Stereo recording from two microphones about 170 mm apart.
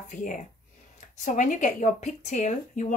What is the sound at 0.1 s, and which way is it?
Speech, 50° left (ahead or behind).